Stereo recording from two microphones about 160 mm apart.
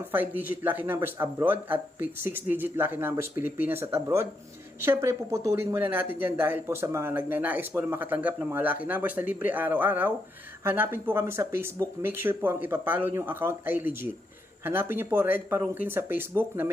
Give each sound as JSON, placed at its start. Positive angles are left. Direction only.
{"t": 0.1, "sound": "speech", "side_deg": -10}